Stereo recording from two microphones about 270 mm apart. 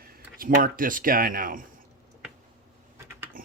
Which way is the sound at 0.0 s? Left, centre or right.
Right.